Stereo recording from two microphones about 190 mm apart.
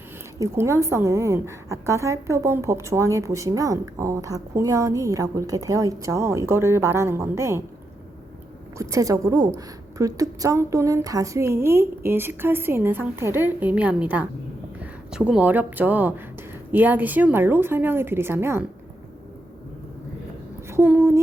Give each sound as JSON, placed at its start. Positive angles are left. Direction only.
{"t": 0.3, "sound": "a woman's voice", "side_deg": -15}
{"t": 8.8, "sound": "a woman's voice", "side_deg": -15}
{"t": 20.7, "sound": "a woman's voice", "side_deg": -10}